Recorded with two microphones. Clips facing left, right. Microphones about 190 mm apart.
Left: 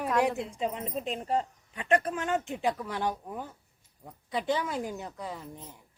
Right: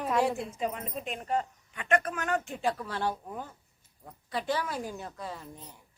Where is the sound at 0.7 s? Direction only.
30° left (ahead or behind).